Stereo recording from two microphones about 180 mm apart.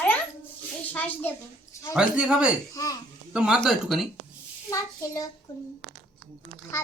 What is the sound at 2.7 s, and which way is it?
Speech, 20° left (ahead or behind).